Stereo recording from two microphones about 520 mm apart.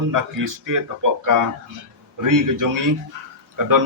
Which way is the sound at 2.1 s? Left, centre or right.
Right.